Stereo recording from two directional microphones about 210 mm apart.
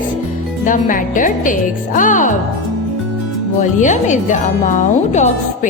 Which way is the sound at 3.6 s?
35° left (ahead or behind).